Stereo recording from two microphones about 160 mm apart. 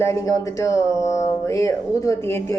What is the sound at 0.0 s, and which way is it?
Speech, 20° left (ahead or behind).